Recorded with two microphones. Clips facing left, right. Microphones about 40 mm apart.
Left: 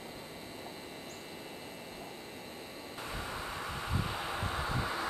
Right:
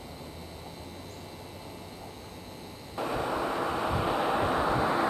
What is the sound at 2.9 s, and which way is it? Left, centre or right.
Vehicle, right.